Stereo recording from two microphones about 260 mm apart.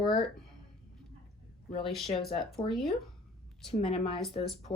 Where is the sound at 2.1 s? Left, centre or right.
Left.